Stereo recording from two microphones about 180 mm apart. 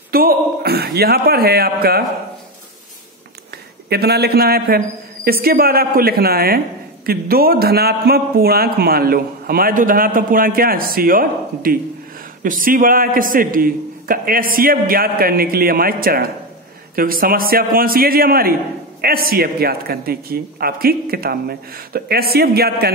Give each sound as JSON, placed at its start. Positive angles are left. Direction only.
{"t": 0.1, "sound": "a man's voice", "side_deg": -55}
{"t": 3.9, "sound": "a man's voice", "side_deg": -65}